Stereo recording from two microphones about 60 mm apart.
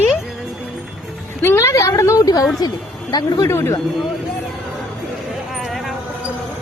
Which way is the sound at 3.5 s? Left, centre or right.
Left.